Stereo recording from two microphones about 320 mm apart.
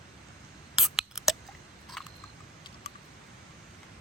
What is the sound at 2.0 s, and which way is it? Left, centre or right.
Camera, centre.